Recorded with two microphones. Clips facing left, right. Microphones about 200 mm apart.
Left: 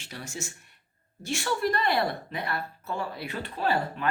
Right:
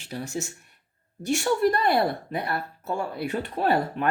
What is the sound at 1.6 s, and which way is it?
Speech, 45° right (ahead or behind).